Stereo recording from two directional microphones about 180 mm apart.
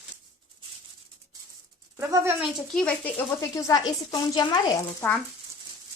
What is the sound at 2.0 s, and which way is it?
Speech, 15° right (ahead or behind).